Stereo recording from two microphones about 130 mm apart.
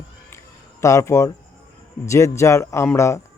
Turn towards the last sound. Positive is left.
turn(degrees=20)  # may be behind; listen again after turning